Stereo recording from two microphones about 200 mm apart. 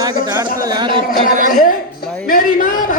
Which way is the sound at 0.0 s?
15° right (ahead or behind).